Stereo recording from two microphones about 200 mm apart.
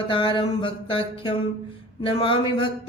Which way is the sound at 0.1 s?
25° left (ahead or behind).